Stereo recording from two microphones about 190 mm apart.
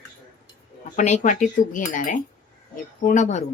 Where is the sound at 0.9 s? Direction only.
40° left (ahead or behind).